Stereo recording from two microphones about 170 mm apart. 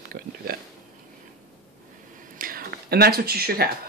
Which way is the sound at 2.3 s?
60° right (ahead or behind).